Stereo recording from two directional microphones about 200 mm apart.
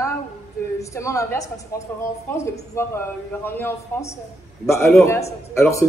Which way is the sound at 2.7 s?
10° left (ahead or behind).